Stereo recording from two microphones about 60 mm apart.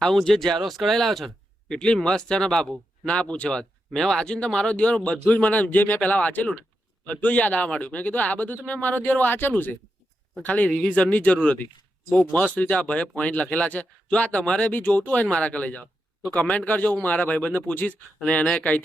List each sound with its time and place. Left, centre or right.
0.0 s speech: centre
3.1 s speech: centre